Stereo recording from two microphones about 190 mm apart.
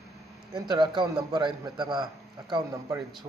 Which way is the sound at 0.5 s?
20° right (ahead or behind).